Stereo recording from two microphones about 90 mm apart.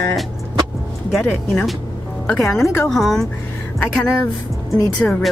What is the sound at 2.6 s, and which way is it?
Speech, 25° left (ahead or behind).